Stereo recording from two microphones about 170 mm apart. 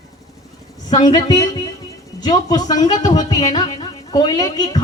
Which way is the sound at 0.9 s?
25° left (ahead or behind).